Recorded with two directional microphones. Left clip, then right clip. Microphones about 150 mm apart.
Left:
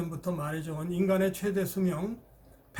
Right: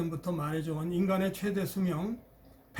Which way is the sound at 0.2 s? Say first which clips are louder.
Even; 20° left (ahead or behind).